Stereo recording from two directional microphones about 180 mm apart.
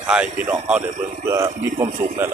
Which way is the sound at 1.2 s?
20° right (ahead or behind).